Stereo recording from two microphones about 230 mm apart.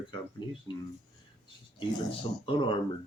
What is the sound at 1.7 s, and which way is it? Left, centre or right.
Speech, left.